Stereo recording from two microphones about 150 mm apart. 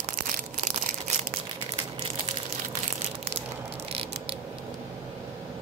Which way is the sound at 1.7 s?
45° right (ahead or behind).